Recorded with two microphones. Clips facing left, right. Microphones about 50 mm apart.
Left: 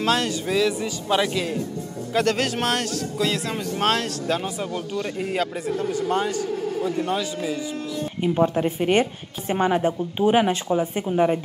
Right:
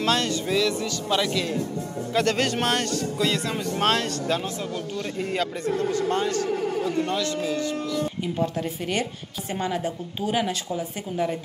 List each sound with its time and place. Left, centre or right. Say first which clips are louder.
0.0 s speech: left 1 dB; centre
2.1 s speech: left 1 dB; centre
8.2 s speech: left 6 dB; left